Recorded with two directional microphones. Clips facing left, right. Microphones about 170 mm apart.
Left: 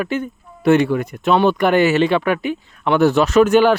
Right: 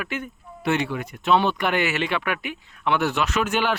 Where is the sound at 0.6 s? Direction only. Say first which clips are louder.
Left 10 dB; 45° left (ahead or behind).